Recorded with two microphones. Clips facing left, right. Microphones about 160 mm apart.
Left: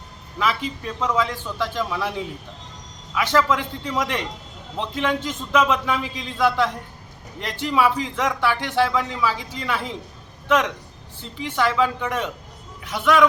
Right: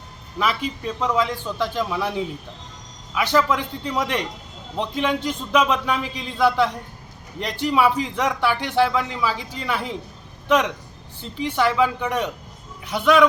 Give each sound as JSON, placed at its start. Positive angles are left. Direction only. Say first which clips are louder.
{"t": 0.3, "sound": "speech", "louder": "even", "side_deg": -15}
{"t": 11.2, "sound": "speech", "louder": "right 2 dB", "side_deg": -15}